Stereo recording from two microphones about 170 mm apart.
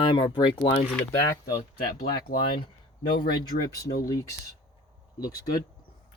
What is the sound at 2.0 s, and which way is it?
Speech, 60° left (ahead or behind).